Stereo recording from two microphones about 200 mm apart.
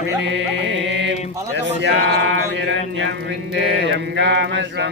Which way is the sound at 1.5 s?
60° right (ahead or behind).